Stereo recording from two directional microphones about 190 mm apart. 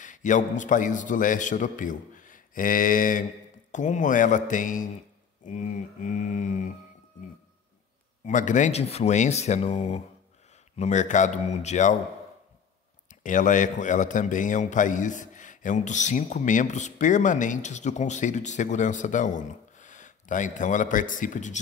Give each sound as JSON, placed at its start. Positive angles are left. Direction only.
{"t": 0.0, "sound": "a man's voice", "side_deg": 40}
{"t": 8.3, "sound": "a man's voice", "side_deg": 40}
{"t": 13.1, "sound": "a man's voice", "side_deg": 45}